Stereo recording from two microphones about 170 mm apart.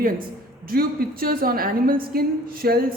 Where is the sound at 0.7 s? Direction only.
60° right (ahead or behind).